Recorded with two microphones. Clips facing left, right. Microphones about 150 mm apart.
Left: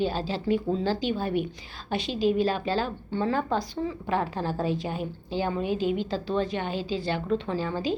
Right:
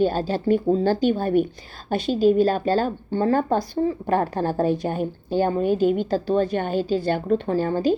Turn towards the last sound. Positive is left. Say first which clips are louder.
# right 7 dB
turn(degrees=-45)  # may be behind; listen again after turning